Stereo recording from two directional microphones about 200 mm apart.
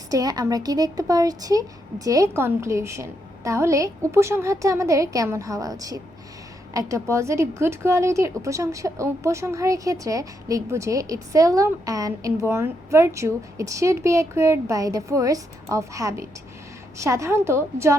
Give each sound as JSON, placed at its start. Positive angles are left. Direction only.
{"t": 0.1, "sound": "a woman's voice", "side_deg": -20}